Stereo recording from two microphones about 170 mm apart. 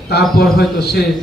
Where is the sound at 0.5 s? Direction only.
75° left (ahead or behind).